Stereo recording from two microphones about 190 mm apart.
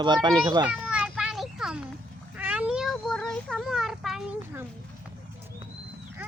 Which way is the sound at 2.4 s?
5° right (ahead or behind).